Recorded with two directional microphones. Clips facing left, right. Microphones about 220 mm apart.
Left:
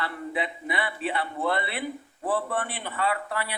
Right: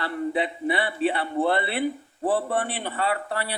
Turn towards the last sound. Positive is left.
turn(degrees=-30)  # may be behind; listen again after turning